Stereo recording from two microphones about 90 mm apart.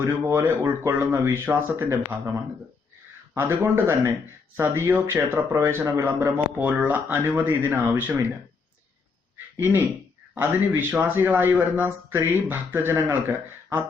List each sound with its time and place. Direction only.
0.0 s speech: 30° right (ahead or behind)
3.3 s speech: 25° right (ahead or behind)
9.6 s speech: 25° right (ahead or behind)